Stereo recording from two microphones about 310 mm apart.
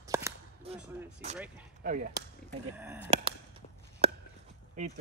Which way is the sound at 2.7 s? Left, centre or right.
Centre.